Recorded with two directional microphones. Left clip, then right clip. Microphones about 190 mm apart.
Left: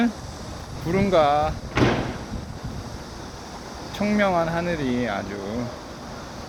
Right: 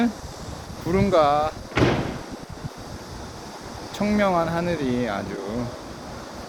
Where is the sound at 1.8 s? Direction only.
50° left (ahead or behind).